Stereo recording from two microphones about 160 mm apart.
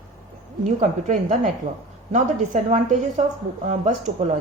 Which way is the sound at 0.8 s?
50° right (ahead or behind).